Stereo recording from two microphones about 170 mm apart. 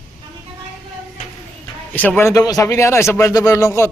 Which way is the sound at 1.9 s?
10° left (ahead or behind).